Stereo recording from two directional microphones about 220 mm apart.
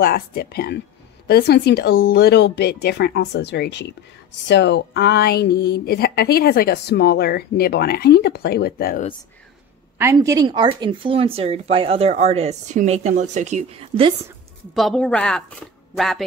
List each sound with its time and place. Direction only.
0.0 s speech: 45° left (ahead or behind)
9.9 s speech: 10° right (ahead or behind)
14.7 s a woman's voice: centre (ahead or behind)